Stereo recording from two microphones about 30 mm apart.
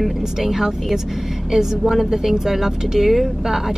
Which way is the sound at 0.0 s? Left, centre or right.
Centre.